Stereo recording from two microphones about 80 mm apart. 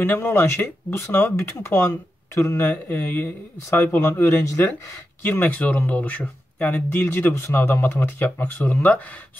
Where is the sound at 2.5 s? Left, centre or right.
Left.